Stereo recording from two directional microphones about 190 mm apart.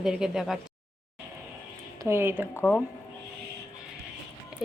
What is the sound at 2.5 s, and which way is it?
Speech, 5° left (ahead or behind).